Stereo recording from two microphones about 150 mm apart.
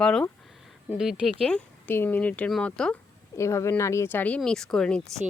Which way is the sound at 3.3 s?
20° left (ahead or behind).